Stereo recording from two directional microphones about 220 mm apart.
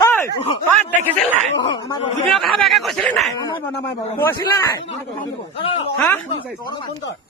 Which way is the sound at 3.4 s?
20° left (ahead or behind).